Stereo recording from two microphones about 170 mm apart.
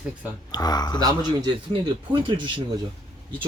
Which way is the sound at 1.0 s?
25° right (ahead or behind).